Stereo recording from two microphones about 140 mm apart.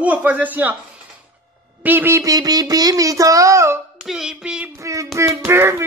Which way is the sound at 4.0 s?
5° right (ahead or behind).